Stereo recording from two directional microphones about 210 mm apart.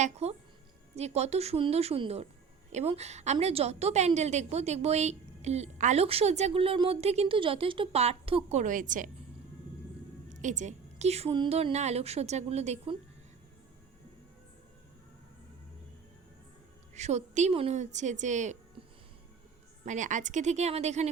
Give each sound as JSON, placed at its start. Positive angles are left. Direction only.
{"t": 0.0, "sound": "a woman's voice", "side_deg": -30}
{"t": 10.2, "sound": "a woman's voice", "side_deg": -35}
{"t": 16.9, "sound": "a woman's voice", "side_deg": -35}
{"t": 19.8, "sound": "a woman's voice", "side_deg": -35}